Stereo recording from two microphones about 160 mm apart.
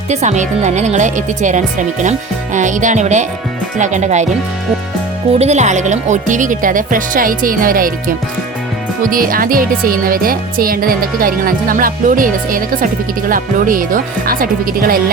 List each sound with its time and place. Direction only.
0.1 s speech: 45° right (ahead or behind)
5.4 s speech: 45° right (ahead or behind); by 15.0 s 65° right (ahead or behind)